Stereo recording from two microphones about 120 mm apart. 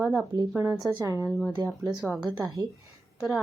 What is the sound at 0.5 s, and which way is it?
Speech, 25° right (ahead or behind).